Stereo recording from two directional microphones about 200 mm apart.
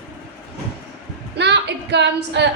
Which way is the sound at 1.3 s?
60° right (ahead or behind).